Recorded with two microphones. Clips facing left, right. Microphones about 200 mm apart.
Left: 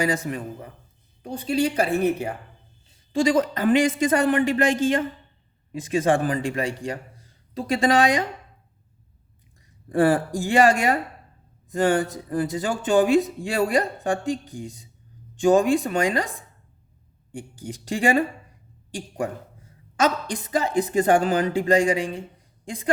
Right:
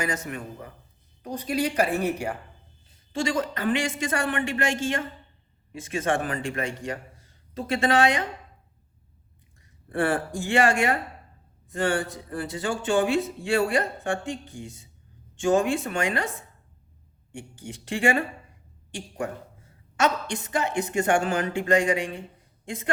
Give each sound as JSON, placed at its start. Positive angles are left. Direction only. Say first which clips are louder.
{"t": 0.0, "sound": "a woman's voice", "louder": "left 5 dB", "side_deg": 30}
{"t": 9.9, "sound": "a woman's voice", "louder": "left 6 dB", "side_deg": 35}
{"t": 12.3, "sound": "a woman's voice", "louder": "left 4 dB", "side_deg": 40}
{"t": 17.5, "sound": "a woman's voice", "louder": "left 3 dB", "side_deg": 35}